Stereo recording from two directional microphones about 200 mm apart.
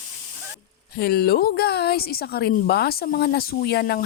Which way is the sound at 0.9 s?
50° left (ahead or behind).